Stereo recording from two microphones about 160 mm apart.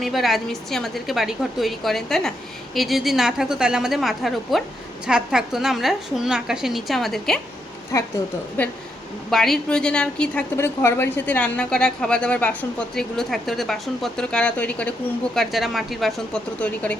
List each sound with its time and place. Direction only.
0.0 s a woman's voice: centre (ahead or behind)
7.9 s a woman's voice: 20° left (ahead or behind)